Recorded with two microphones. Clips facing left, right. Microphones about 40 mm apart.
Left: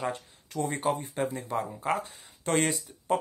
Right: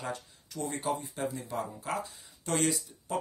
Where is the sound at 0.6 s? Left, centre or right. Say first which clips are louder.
Left 4 dB; left.